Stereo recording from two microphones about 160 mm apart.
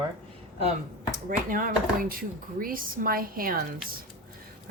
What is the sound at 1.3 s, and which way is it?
Speech, 60° right (ahead or behind).